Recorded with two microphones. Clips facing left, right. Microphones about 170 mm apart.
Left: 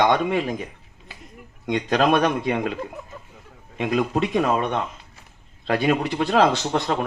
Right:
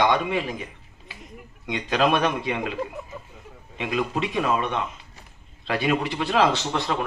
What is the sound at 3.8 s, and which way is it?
Speech, 45° left (ahead or behind).